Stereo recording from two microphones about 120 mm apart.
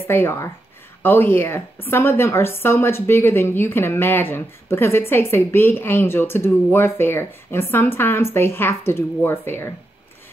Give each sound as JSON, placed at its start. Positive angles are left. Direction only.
{"t": 0.0, "sound": "a woman's voice", "side_deg": 20}